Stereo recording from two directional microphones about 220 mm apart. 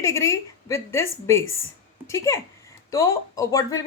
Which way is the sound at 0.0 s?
15° left (ahead or behind).